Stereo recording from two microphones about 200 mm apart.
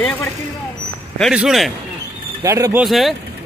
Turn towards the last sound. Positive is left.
turn(degrees=0)  # may be behind; listen again after turning